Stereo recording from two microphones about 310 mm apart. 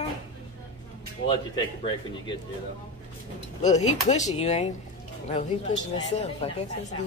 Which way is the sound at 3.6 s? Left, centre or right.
Left.